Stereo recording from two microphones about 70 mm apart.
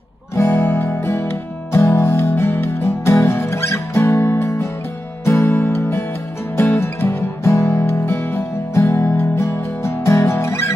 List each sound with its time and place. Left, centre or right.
0.4 s music: left
5.5 s music: left
7.1 s music: left